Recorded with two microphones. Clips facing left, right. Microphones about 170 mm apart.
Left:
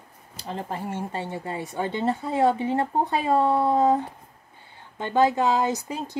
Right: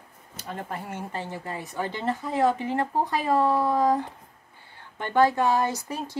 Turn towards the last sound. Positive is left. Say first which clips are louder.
# left 1 dB
turn(degrees=15)  # may be behind; listen again after turning